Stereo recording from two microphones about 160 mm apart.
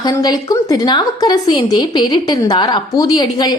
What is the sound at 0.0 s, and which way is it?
A woman's voice, 25° left (ahead or behind).